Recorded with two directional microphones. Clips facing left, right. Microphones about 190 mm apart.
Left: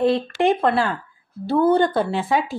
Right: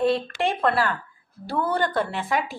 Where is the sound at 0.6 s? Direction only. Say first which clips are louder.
Left 3 dB; 25° left (ahead or behind).